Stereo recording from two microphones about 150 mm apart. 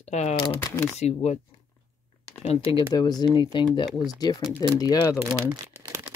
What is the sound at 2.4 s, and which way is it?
Speech, 35° left (ahead or behind).